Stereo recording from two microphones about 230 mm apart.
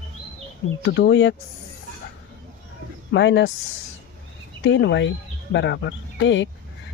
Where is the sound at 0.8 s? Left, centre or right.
Left.